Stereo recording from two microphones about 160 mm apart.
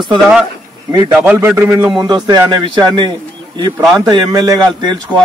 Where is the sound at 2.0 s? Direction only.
25° right (ahead or behind).